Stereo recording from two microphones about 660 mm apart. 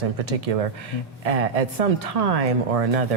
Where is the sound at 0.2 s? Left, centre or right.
Right.